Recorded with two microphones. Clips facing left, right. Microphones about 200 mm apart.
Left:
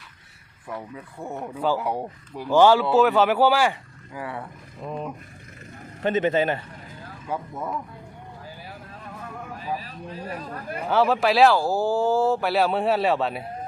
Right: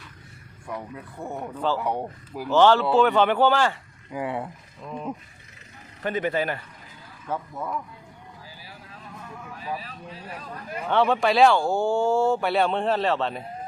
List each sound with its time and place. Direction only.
0.7 s speech: centre (ahead or behind)
2.5 s speech: 10° left (ahead or behind)
4.1 s speech: 20° right (ahead or behind)
6.0 s speech: 25° left (ahead or behind)
7.3 s speech: 10° left (ahead or behind)
9.6 s speech: 45° left (ahead or behind)
10.8 s speech: 5° left (ahead or behind)